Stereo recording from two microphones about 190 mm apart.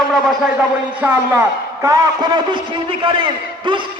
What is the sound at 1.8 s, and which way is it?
A man's voice, 20° right (ahead or behind).